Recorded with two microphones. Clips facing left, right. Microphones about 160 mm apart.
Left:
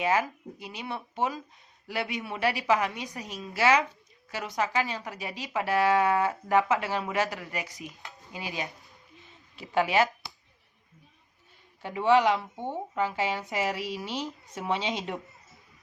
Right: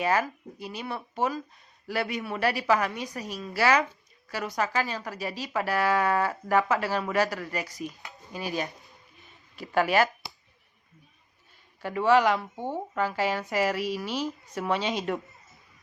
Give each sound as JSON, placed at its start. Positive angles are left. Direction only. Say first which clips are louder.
{"t": 0.0, "sound": "speech", "louder": "right 1 dB", "side_deg": 15}
{"t": 9.7, "sound": "speech", "louder": "right 1 dB", "side_deg": 20}
{"t": 11.8, "sound": "speech", "louder": "right 1 dB", "side_deg": 20}